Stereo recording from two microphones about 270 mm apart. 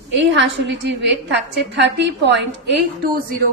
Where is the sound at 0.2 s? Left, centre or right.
Right.